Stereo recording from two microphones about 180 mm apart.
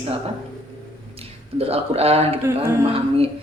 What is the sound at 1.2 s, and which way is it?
A man's voice, 35° right (ahead or behind).